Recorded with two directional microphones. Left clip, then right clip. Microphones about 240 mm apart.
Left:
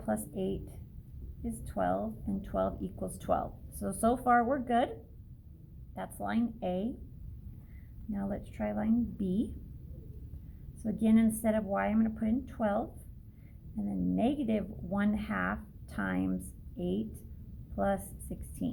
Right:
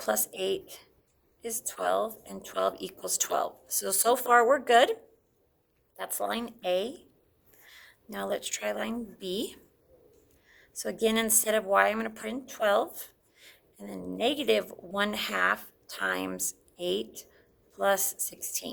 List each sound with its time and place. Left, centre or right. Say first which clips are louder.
0.0 s speech: right 6 dB; right
6.1 s speech: right 3 dB; right
8.1 s speech: right 8 dB; right
10.8 s speech: right 3 dB; right
13.9 s a woman's voice: right 3 dB; right